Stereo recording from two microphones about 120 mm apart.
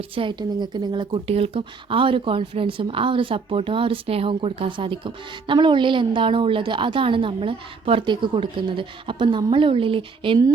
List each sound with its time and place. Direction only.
0.1 s speech: 45° right (ahead or behind)
1.3 s speech: 55° right (ahead or behind)